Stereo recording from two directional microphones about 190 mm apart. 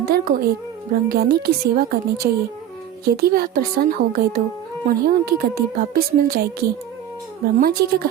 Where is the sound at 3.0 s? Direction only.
55° right (ahead or behind).